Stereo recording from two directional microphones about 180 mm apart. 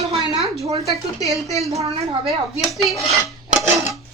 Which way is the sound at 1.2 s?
Centre (ahead or behind).